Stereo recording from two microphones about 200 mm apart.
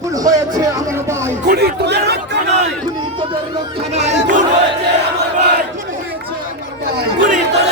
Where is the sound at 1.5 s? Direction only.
50° right (ahead or behind).